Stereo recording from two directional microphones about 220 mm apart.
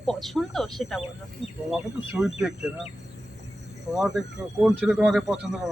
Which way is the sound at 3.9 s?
Centre (ahead or behind).